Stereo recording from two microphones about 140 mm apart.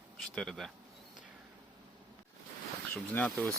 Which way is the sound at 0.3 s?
Centre (ahead or behind).